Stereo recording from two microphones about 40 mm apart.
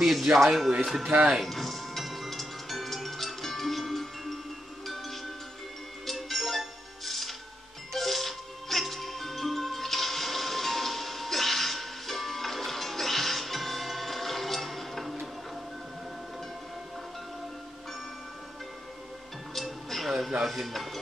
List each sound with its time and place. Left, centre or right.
0.0 s speech: centre
1.0 s speech: right
1.4 s music: centre
19.5 s music: centre